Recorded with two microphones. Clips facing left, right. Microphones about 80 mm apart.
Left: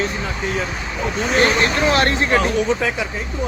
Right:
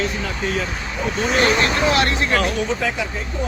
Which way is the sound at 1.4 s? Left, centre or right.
Left.